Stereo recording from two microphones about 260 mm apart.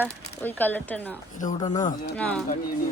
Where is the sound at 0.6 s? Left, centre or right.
Centre.